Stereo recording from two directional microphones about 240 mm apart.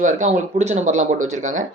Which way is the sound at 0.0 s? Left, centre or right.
Right.